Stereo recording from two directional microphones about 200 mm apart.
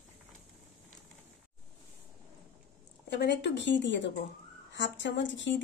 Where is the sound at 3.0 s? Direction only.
60° left (ahead or behind).